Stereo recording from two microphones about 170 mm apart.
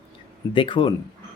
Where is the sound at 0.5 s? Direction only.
30° left (ahead or behind).